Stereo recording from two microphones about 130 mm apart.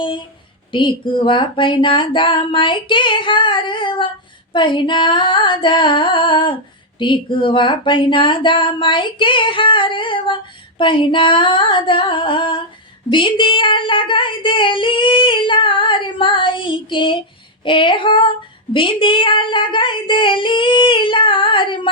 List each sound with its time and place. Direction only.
0.0 s speech: 40° left (ahead or behind)